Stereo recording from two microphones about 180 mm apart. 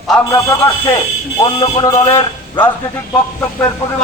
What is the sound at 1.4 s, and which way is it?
A man's voice, 20° left (ahead or behind).